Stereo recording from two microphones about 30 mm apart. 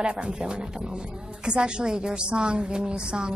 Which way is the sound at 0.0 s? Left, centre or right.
Right.